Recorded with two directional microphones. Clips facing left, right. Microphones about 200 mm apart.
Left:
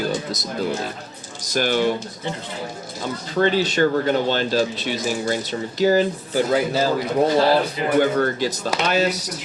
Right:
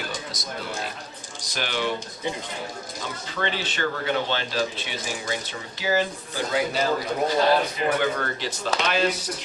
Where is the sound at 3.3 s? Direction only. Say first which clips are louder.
Left 11 dB; 40° left (ahead or behind).